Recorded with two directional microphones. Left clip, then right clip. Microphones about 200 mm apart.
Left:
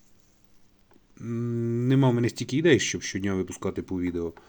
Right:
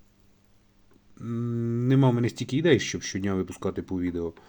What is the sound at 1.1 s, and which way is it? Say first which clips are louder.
Speech: left 1 dB; centre (ahead or behind).